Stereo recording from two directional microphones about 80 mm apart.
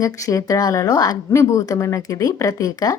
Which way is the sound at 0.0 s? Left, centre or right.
Left.